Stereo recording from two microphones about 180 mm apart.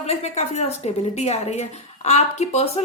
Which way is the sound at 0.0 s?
40° left (ahead or behind).